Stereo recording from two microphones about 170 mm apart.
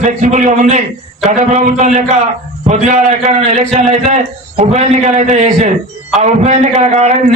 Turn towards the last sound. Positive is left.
turn(degrees=-45)  # may be behind; listen again after turning